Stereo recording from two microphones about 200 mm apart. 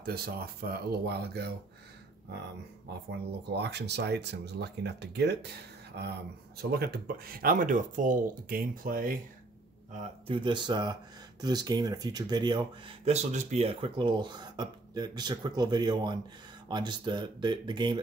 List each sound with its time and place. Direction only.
0.0 s speech: 50° right (ahead or behind)
3.1 s speech: 55° right (ahead or behind)
6.6 s speech: 50° right (ahead or behind)
9.9 s speech: 25° right (ahead or behind)